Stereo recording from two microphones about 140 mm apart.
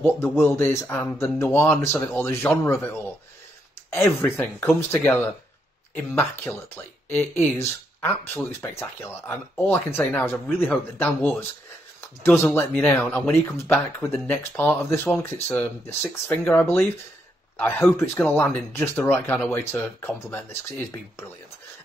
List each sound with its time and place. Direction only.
0.0 s speech: 15° left (ahead or behind)
13.0 s speech: 5° left (ahead or behind)
13.3 s speech: 20° left (ahead or behind)